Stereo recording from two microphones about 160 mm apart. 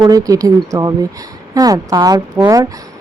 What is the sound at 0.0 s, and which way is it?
Speech, 20° right (ahead or behind).